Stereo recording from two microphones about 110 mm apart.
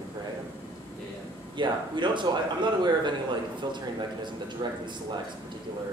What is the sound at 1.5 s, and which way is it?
Speech, 45° right (ahead or behind).